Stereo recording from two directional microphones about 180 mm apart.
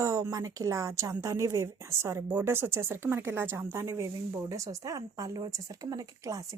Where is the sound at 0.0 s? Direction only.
20° right (ahead or behind).